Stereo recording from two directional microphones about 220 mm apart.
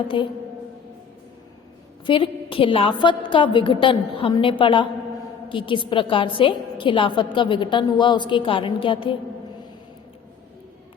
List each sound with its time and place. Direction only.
0.1 s a woman's voice: 20° left (ahead or behind)
2.0 s a woman's voice: 25° left (ahead or behind)